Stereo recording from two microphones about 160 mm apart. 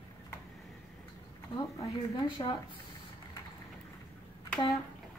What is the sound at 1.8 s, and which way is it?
Speech, 30° left (ahead or behind).